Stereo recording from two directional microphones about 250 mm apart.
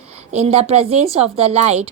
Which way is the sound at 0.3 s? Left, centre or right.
Right.